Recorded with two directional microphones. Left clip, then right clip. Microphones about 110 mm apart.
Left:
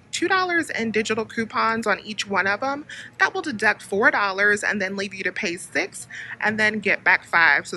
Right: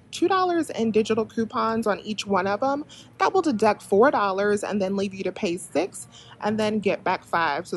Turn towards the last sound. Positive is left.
turn(degrees=-25)  # may be behind; listen again after turning